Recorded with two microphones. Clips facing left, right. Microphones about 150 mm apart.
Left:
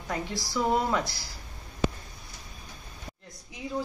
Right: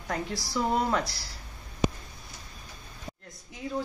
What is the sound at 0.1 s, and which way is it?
Speech, centre (ahead or behind).